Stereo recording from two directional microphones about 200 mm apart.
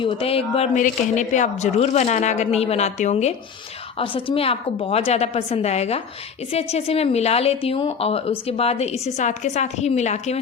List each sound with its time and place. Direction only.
0.0 s a woman's voice: 30° left (ahead or behind)